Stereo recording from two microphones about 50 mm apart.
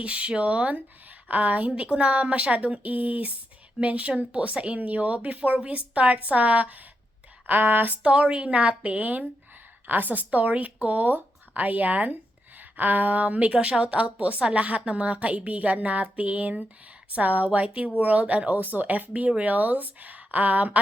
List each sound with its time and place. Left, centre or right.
0.0 s a woman's voice: right
7.4 s speech: right
8.0 s a woman's voice: right